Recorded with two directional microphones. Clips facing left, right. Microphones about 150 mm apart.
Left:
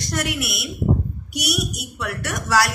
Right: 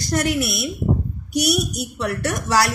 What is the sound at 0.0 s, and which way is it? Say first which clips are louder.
A woman's voice: right 5 dB; 35° right (ahead or behind).